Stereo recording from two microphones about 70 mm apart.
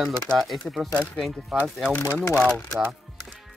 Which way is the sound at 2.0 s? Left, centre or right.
Left.